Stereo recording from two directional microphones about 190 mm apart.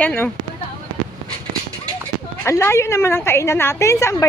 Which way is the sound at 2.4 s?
15° left (ahead or behind).